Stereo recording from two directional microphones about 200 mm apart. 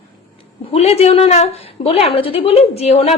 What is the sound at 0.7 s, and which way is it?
A woman's voice, 30° left (ahead or behind).